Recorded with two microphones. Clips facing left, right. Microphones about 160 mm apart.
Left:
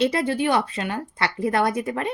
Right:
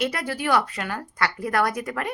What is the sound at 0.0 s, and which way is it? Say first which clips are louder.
A woman's voice: left 5 dB; 25° left (ahead or behind).